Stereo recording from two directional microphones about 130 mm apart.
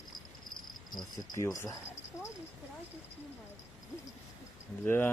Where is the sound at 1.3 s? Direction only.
25° left (ahead or behind).